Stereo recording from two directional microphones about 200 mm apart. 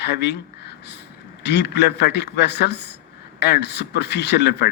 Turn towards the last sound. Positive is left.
turn(degrees=60)  # may be behind; listen again after turning